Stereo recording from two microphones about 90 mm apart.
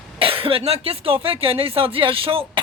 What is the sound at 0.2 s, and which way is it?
Speech, 90° right.